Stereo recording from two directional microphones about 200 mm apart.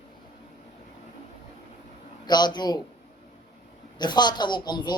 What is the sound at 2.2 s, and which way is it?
Speech, 20° left (ahead or behind).